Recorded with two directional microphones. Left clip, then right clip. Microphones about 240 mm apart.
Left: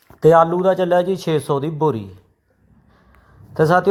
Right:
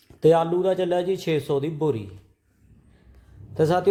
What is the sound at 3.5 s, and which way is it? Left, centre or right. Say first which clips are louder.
Speech: left 6 dB; centre.